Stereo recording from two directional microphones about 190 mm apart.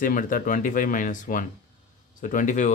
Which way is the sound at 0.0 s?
45° left (ahead or behind).